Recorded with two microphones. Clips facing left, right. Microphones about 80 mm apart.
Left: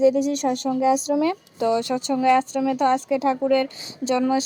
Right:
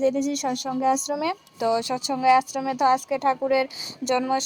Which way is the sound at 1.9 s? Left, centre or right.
Right.